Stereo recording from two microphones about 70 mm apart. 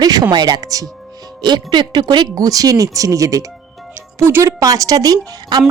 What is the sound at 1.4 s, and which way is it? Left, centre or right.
Speech, right.